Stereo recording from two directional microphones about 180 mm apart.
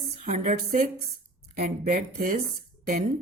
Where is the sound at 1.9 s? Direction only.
50° right (ahead or behind).